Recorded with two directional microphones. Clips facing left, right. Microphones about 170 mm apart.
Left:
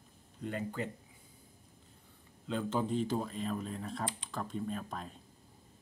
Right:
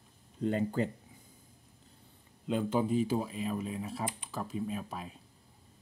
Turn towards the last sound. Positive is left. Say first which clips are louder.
# right 1 dB
turn(degrees=-5)  # may be behind; listen again after turning